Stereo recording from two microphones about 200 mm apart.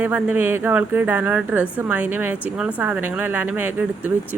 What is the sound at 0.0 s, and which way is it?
A woman's voice, 5° right (ahead or behind).